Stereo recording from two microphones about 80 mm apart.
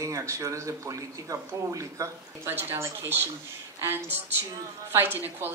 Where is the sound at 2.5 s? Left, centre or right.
Right.